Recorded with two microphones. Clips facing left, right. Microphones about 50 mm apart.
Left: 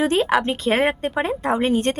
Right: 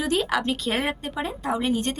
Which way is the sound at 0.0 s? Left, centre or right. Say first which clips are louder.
Left 5 dB; left.